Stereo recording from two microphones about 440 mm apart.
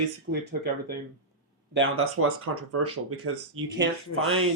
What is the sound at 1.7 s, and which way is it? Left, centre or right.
Speech, right.